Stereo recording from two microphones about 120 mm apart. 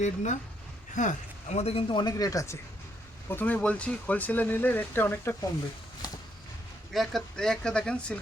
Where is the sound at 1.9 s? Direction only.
35° left (ahead or behind).